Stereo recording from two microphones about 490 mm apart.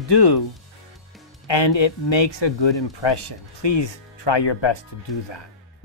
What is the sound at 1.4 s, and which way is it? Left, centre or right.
Speech, left.